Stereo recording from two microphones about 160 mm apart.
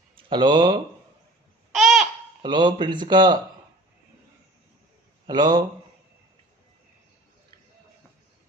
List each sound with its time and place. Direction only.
0.2 s speech: 30° right (ahead or behind)
1.7 s babbling: centre (ahead or behind)
2.4 s speech: 30° right (ahead or behind)
5.2 s a man's voice: 30° right (ahead or behind)